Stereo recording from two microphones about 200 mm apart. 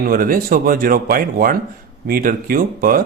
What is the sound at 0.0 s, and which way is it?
Speech, 45° right (ahead or behind).